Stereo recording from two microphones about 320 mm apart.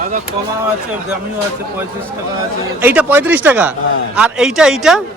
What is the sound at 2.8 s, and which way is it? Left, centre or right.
A man's voice, centre.